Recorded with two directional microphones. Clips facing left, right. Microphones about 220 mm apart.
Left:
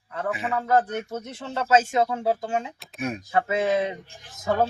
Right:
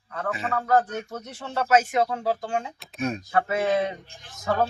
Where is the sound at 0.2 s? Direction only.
15° left (ahead or behind).